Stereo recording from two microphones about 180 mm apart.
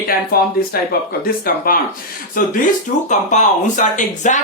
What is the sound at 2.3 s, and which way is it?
Speech, 50° left (ahead or behind).